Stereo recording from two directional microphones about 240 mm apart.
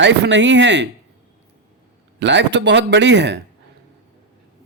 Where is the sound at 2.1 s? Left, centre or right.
Right.